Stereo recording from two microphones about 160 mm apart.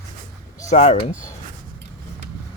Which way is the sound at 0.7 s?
45° left (ahead or behind).